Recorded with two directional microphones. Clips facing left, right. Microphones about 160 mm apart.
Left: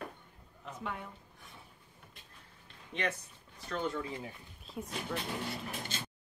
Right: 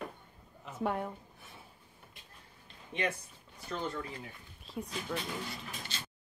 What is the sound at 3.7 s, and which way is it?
Speech, 5° left (ahead or behind).